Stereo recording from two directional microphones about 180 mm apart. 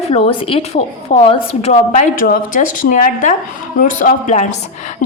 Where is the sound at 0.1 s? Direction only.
35° left (ahead or behind).